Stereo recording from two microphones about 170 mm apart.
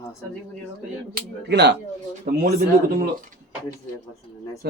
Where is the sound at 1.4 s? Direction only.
80° right.